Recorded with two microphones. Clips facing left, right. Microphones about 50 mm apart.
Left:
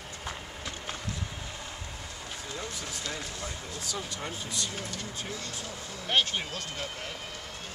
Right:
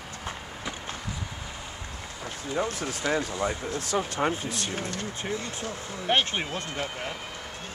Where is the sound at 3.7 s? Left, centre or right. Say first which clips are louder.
Right 9 dB; right.